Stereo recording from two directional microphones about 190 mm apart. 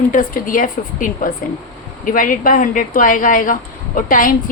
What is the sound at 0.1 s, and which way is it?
Speech, 45° left (ahead or behind).